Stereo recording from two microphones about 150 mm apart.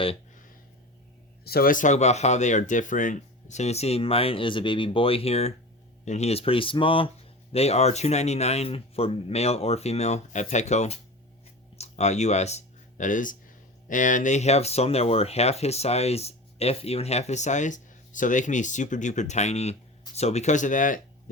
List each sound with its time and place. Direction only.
1.5 s speech: 80° left; by 21.0 s 60° left (ahead or behind)